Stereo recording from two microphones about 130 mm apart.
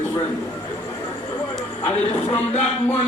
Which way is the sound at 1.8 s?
35° left (ahead or behind).